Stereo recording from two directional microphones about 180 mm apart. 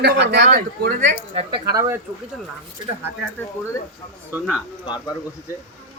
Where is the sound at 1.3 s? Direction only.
35° right (ahead or behind).